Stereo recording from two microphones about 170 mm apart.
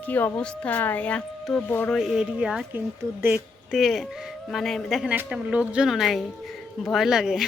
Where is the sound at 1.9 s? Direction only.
5° right (ahead or behind).